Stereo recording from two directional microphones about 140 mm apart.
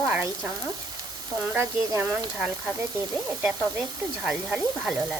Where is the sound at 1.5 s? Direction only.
20° right (ahead or behind).